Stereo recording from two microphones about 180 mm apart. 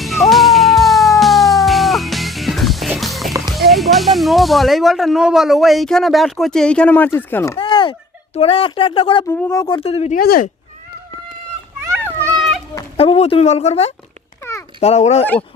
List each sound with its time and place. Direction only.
0.0 s cat: centre (ahead or behind)
3.5 s speech: centre (ahead or behind)
7.6 s speech: 25° left (ahead or behind)
9.2 s speech: 15° left (ahead or behind); by 10.2 s 35° left (ahead or behind)
10.2 s speech: 55° left (ahead or behind)
12.0 s children playing: 5° left (ahead or behind)
13.0 s speech: 35° left (ahead or behind)